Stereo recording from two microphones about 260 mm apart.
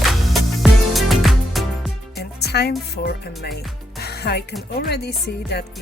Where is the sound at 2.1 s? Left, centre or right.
Left.